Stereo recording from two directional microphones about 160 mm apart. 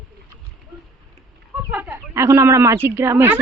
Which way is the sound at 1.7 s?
10° right (ahead or behind).